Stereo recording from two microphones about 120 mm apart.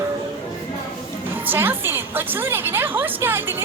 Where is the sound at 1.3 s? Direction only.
15° right (ahead or behind).